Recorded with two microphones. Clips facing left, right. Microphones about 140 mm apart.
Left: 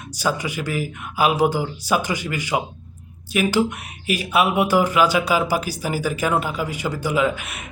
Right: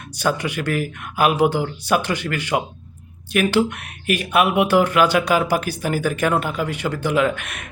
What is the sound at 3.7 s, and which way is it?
Speech, 60° right (ahead or behind).